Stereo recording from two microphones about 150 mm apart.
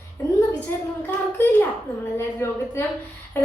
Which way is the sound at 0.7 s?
15° left (ahead or behind).